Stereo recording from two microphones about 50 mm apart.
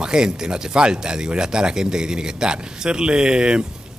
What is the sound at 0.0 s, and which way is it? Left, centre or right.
Speech, centre.